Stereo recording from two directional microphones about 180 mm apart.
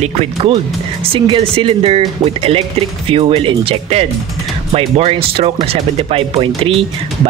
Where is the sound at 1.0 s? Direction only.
30° right (ahead or behind).